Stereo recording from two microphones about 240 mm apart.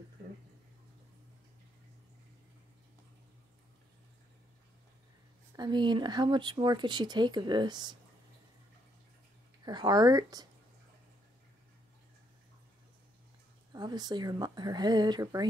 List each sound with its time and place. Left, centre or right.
5.6 s speech: centre
9.7 s speech: centre
13.7 s speech: centre